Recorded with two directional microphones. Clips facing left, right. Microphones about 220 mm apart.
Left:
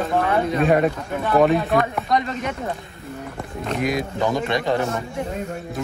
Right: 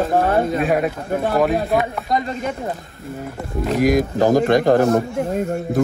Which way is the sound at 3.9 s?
45° right (ahead or behind).